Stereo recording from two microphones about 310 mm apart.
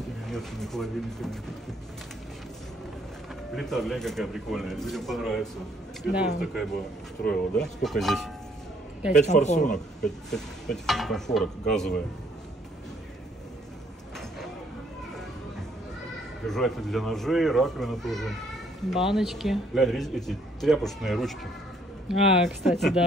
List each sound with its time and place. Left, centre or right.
0.3 s a man's voice: centre
3.5 s a man's voice: centre
9.2 s a man's voice: left
10.0 s a man's voice: centre
16.4 s a man's voice: centre